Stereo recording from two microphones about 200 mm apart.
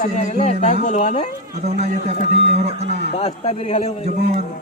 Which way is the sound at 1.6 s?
35° right (ahead or behind).